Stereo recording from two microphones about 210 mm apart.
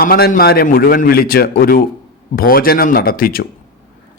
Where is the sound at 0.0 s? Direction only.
45° left (ahead or behind).